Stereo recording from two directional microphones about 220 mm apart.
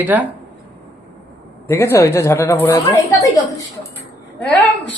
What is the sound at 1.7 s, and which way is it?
A man's voice, 10° left (ahead or behind).